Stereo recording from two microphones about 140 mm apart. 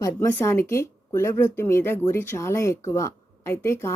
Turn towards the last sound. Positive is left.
turn(degrees=20)  # may be behind; listen again after turning